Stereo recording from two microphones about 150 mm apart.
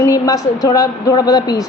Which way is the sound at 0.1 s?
25° left (ahead or behind).